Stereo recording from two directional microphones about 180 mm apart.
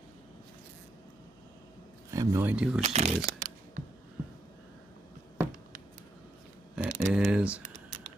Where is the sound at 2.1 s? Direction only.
15° right (ahead or behind).